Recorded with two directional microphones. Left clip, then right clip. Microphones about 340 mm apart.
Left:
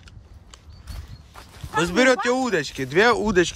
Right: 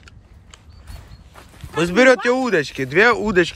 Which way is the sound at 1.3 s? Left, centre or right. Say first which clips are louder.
Left 1 dB; centre.